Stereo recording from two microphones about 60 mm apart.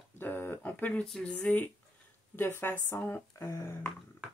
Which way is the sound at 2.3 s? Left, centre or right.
Left.